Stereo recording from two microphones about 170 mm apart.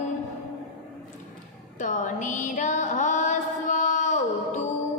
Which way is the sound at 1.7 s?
50° left (ahead or behind).